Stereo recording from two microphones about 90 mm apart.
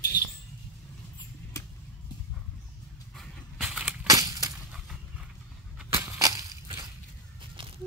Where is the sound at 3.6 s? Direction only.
15° right (ahead or behind).